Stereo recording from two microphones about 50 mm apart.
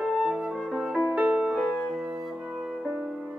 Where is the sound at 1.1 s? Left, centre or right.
Right.